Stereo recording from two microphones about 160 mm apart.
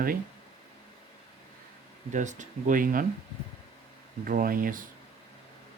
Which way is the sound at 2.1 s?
50° right (ahead or behind).